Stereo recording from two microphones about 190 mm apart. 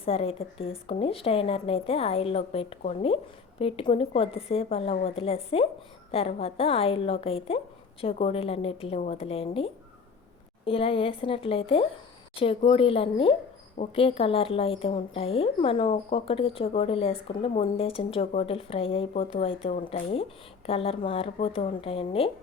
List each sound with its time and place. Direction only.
0.0 s a woman's voice: 30° left (ahead or behind)
10.7 s a woman's voice: 30° left (ahead or behind)